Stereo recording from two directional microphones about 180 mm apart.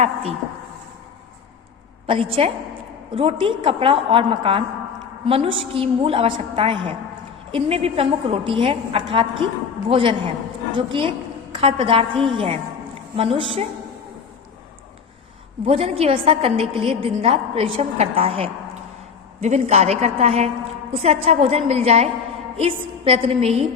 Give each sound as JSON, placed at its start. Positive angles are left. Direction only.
{"t": 0.0, "sound": "a woman's voice", "side_deg": -35}
{"t": 2.0, "sound": "a woman's voice", "side_deg": -30}
{"t": 15.6, "sound": "a woman's voice", "side_deg": -30}